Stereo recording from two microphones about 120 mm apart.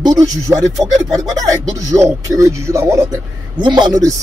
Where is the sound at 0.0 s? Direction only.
30° right (ahead or behind).